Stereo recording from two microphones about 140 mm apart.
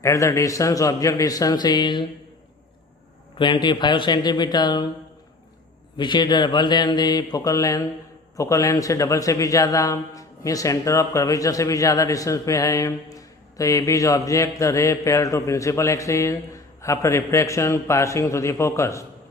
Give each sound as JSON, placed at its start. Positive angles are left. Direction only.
{"t": 0.0, "sound": "a man's voice", "side_deg": 20}
{"t": 3.3, "sound": "mantra", "side_deg": 35}
{"t": 6.0, "sound": "mantra", "side_deg": 30}
{"t": 8.4, "sound": "a man's voice", "side_deg": 25}